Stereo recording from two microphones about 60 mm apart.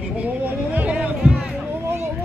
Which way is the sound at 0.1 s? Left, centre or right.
Right.